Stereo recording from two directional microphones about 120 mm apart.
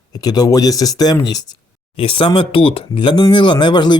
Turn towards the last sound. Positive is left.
turn(degrees=40)  # may be behind; listen again after turning